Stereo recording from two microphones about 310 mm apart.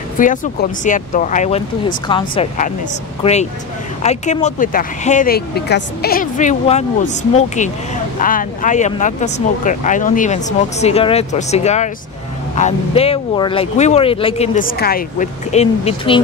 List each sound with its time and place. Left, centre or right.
0.2 s speech: left